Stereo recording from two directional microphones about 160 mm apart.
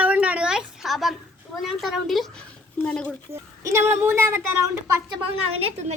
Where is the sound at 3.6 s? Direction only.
15° right (ahead or behind).